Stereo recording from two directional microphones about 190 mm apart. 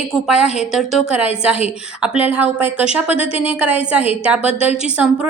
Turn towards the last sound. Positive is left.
turn(degrees=-5)  # may be behind; listen again after turning